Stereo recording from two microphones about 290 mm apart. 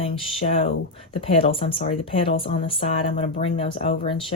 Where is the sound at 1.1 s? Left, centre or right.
Centre.